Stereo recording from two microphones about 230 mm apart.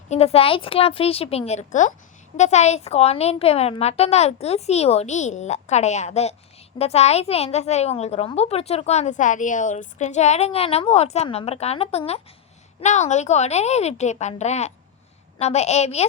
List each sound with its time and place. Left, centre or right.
0.1 s a woman's voice: left